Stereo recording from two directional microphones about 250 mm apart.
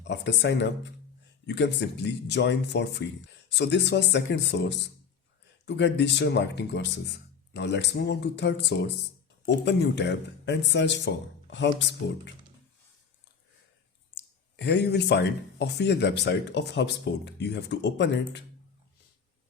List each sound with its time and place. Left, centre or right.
0.0 s speech: left
14.2 s speech: left